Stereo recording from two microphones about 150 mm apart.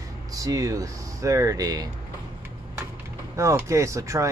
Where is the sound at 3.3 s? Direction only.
20° right (ahead or behind).